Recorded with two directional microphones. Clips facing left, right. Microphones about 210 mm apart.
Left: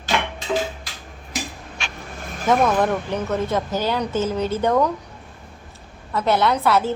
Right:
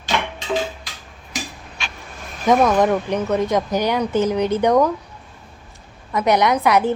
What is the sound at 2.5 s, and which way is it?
A woman's voice, 15° right (ahead or behind).